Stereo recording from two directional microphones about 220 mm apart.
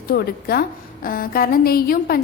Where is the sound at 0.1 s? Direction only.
45° left (ahead or behind).